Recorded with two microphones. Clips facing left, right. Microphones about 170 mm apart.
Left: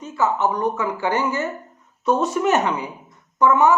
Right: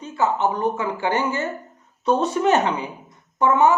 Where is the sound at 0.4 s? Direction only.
25° right (ahead or behind).